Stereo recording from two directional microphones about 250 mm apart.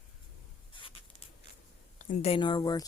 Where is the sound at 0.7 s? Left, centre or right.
Left.